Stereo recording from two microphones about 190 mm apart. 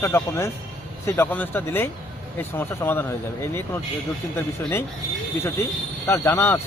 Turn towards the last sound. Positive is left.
turn(degrees=10)  # may be behind; listen again after turning